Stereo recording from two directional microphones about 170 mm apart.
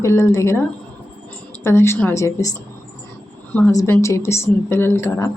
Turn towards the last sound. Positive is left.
turn(degrees=15)  # may be behind; listen again after turning